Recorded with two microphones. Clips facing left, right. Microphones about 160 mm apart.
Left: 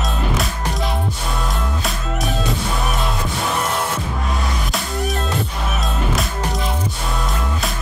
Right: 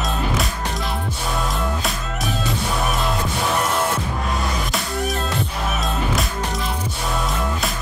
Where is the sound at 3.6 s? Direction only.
Centre (ahead or behind).